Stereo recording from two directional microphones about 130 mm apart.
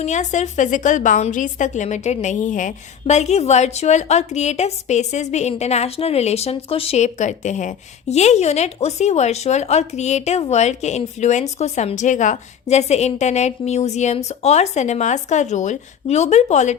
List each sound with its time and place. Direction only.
0.0 s a woman's voice: 65° left (ahead or behind)